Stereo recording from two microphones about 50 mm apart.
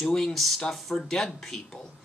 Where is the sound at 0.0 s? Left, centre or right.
Centre.